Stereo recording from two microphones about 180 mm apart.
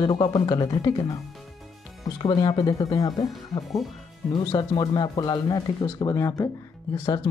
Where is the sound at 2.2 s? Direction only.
25° left (ahead or behind).